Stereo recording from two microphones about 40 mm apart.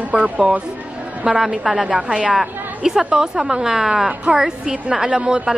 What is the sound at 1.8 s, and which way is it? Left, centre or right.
Speech, right.